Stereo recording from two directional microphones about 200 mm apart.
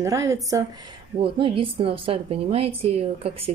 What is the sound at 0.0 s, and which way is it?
Speech, 15° right (ahead or behind).